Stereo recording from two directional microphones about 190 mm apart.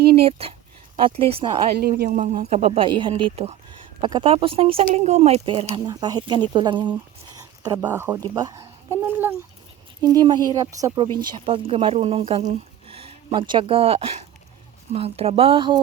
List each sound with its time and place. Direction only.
0.2 s speech: 30° right (ahead or behind)
2.0 s speech: 40° right (ahead or behind)
5.6 s speech: 20° right (ahead or behind)
7.3 s a sound: 20° right (ahead or behind)
7.9 s speech: 10° right (ahead or behind)